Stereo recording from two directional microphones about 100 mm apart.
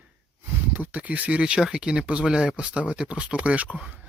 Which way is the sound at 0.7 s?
15° right (ahead or behind).